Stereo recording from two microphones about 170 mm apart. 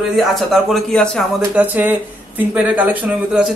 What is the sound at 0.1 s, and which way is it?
A man's voice, centre (ahead or behind).